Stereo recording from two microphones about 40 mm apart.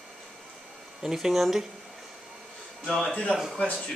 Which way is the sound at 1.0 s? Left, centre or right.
Centre.